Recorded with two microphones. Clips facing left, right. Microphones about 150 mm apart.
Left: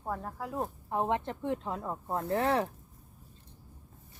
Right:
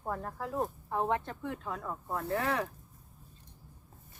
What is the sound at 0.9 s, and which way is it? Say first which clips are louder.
Speech: left 4 dB; 20° left (ahead or behind).